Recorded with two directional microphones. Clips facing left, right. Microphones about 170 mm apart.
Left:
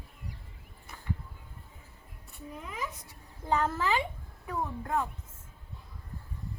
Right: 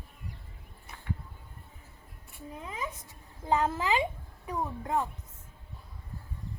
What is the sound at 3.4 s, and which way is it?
A child's voice, 20° right (ahead or behind).